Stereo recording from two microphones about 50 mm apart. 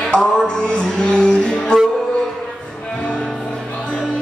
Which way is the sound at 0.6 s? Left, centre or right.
Centre.